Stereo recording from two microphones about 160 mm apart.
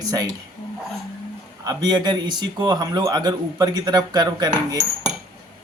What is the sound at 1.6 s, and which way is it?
A man's voice, 25° right (ahead or behind).